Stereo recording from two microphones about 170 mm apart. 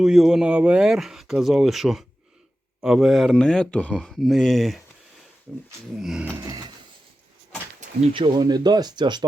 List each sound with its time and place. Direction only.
0.0 s speech: 5° right (ahead or behind)
6.0 s speech: 5° right (ahead or behind)
8.1 s speech: 25° right (ahead or behind)